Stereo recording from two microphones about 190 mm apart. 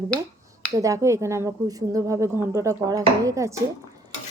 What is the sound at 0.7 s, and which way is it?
A woman's voice, 15° right (ahead or behind).